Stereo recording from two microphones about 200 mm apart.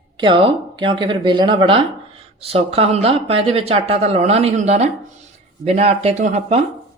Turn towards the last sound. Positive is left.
turn(degrees=-35)  # may be behind; listen again after turning